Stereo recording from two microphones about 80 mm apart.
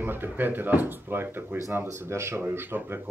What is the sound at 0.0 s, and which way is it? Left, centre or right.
Speech, right.